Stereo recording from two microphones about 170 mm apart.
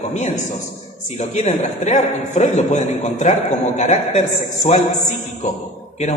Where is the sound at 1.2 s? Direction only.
40° left (ahead or behind).